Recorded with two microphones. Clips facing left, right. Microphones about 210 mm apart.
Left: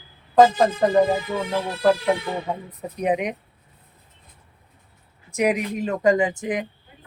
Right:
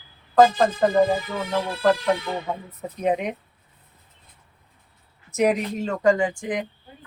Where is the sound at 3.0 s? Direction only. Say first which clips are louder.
Left 1 dB; 15° left (ahead or behind).